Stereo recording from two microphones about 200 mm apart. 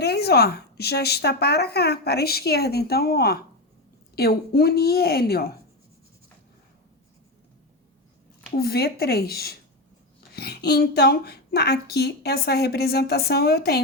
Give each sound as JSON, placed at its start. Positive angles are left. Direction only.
{"t": 0.0, "sound": "speech", "side_deg": 55}
{"t": 8.5, "sound": "speech", "side_deg": 50}